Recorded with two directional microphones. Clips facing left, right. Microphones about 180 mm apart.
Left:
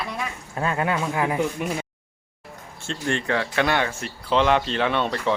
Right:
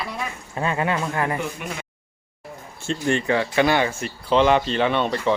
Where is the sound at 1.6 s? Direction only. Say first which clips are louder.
Left 5 dB; 30° left (ahead or behind).